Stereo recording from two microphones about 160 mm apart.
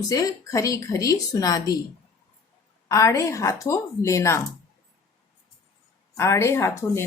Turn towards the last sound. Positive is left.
turn(degrees=15)  # may be behind; listen again after turning